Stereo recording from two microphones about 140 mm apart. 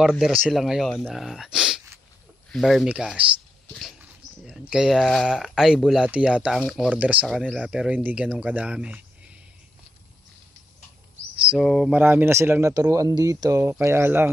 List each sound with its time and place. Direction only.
0.0 s speech: centre (ahead or behind)
4.5 s speech: 5° right (ahead or behind)
7.2 s speech: 5° left (ahead or behind)
7.6 s speech: 10° right (ahead or behind)
11.4 s speech: 5° right (ahead or behind)
12.0 s speech: 15° right (ahead or behind)